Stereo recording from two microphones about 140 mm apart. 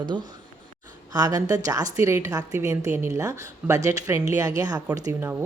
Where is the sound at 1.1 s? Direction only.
30° right (ahead or behind).